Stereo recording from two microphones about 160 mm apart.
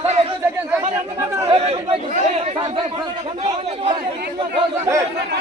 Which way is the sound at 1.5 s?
40° right (ahead or behind).